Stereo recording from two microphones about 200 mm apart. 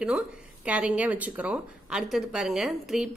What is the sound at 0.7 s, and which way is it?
Speech, 5° right (ahead or behind).